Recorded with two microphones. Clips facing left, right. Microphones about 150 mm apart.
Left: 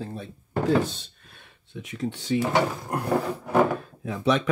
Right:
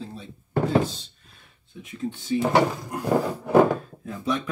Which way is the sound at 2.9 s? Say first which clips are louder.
Left 2 dB; 65° left (ahead or behind).